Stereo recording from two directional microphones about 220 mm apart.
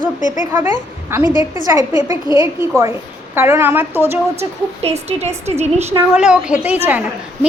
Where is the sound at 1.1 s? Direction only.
10° right (ahead or behind).